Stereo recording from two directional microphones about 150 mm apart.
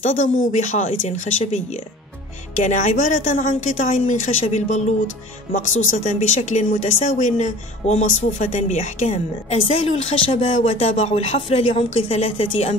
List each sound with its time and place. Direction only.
0.0 s a woman's voice: 55° left (ahead or behind)
6.0 s a woman's voice: 55° left (ahead or behind)